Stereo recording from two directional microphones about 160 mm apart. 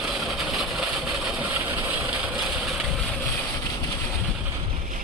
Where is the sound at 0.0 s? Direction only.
Centre (ahead or behind).